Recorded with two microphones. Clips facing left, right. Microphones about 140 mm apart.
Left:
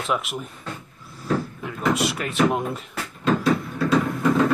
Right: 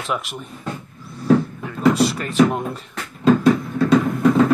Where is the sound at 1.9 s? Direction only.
35° right (ahead or behind).